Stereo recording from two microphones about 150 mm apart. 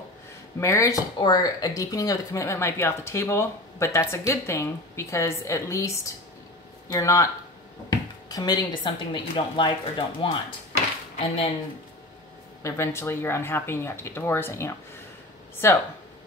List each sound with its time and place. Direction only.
0.6 s speech: 20° left (ahead or behind)
12.6 s speech: 20° left (ahead or behind)